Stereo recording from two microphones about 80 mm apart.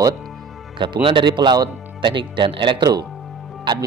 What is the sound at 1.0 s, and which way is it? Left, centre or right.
A man's voice, right.